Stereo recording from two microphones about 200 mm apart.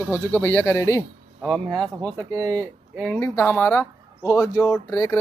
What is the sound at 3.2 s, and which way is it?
Speech, 10° left (ahead or behind).